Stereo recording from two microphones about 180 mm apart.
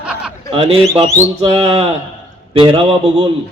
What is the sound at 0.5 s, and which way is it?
A man's voice, 30° right (ahead or behind).